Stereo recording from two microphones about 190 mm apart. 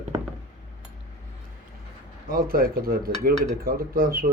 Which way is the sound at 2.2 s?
50° right (ahead or behind).